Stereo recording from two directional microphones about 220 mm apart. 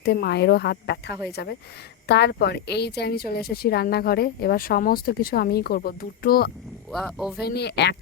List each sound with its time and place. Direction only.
0.0 s a woman's voice: 50° left (ahead or behind)
6.9 s speech: centre (ahead or behind)
7.4 s a woman's voice: 50° left (ahead or behind)